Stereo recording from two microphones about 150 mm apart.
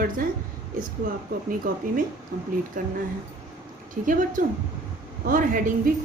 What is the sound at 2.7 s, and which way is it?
Speech, 65° right (ahead or behind).